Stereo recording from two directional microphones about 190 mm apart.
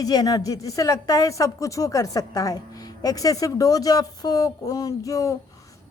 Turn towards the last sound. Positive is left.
turn(degrees=15)  # may be behind; listen again after turning